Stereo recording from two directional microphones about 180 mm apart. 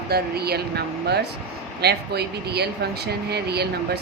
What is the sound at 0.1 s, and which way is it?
Speech, 60° right (ahead or behind).